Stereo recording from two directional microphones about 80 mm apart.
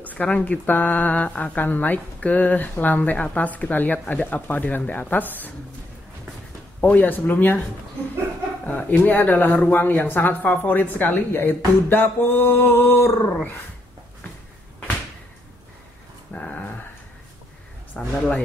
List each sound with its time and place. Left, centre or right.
0.0 s speech: centre
6.8 s speech: left
8.6 s speech: centre
16.3 s dog: centre
17.9 s speech: centre